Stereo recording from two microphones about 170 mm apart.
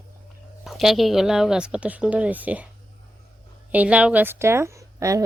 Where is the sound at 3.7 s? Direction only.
10° right (ahead or behind).